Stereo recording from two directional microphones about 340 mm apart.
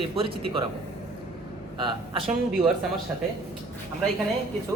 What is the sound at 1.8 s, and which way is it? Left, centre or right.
Speech, centre.